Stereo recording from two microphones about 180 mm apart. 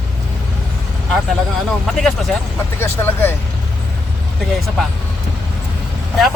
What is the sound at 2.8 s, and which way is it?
Speech, 10° left (ahead or behind).